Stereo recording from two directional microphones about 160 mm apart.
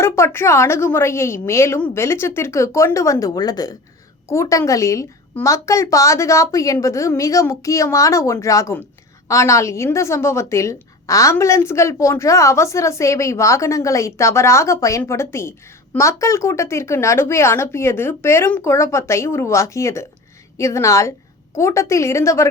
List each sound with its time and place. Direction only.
0.0 s a woman's voice: 15° left (ahead or behind)